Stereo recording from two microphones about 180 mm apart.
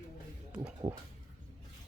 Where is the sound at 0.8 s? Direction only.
15° right (ahead or behind).